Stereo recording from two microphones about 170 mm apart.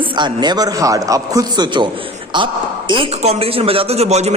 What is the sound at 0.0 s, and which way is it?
A man's voice, 25° right (ahead or behind).